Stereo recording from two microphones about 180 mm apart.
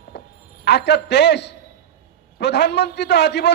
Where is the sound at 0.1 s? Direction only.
65° left (ahead or behind).